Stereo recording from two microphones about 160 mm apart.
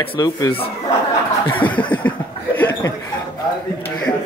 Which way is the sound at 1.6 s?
10° left (ahead or behind).